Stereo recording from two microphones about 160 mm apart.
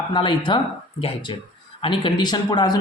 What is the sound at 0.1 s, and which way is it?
Speech, 30° left (ahead or behind).